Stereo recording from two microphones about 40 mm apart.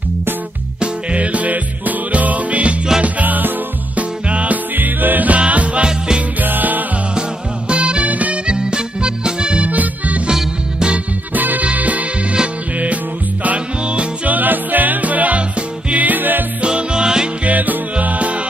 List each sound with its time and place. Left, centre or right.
0.7 s music: right
4.3 s music: right
4.7 s music: right
5.4 s music: right
5.9 s music: centre
6.4 s music: right
7.2 s music: right
8.5 s music: right
9.7 s music: right
11.3 s music: right
16.6 s music: right
17.5 s music: right